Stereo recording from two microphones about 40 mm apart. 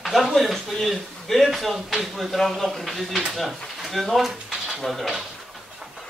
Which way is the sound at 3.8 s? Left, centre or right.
Centre.